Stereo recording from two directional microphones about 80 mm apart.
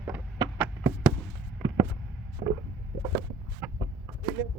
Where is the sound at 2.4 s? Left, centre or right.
Right.